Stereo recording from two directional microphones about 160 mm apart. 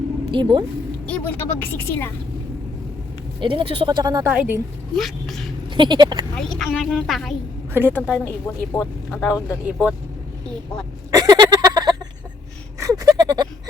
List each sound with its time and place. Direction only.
0.3 s speech: 30° right (ahead or behind)
1.0 s speech: 10° left (ahead or behind)
3.4 s speech: 35° right (ahead or behind)
4.3 s a woman's voice: 10° right (ahead or behind)
4.9 s speech: centre (ahead or behind)
5.7 s speech: 30° right (ahead or behind)
6.3 s speech: centre (ahead or behind)
7.7 s a woman's voice: 15° right (ahead or behind)
7.9 s speech: 10° left (ahead or behind)
9.6 s a woman's voice: 10° right (ahead or behind)
11.1 s a sound: 25° right (ahead or behind)
12.8 s gasp: 20° right (ahead or behind)